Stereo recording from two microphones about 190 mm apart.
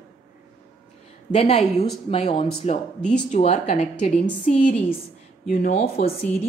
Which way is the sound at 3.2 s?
35° left (ahead or behind).